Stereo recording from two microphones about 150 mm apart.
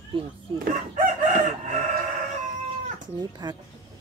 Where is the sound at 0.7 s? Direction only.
60° right (ahead or behind).